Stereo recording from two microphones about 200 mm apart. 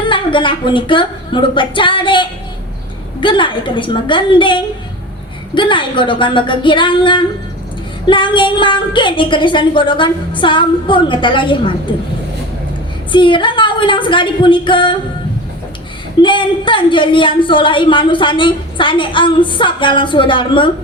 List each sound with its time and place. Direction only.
0.0 s a woman's voice: 25° left (ahead or behind)
13.1 s a woman's voice: 25° left (ahead or behind)
16.2 s a woman's voice: 25° left (ahead or behind)